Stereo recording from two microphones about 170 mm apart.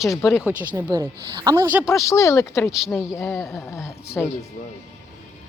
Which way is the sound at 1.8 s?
20° left (ahead or behind).